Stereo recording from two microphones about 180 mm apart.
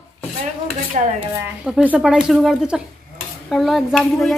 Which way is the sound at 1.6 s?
5° right (ahead or behind).